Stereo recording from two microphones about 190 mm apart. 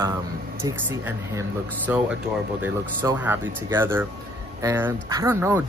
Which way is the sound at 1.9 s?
10° right (ahead or behind).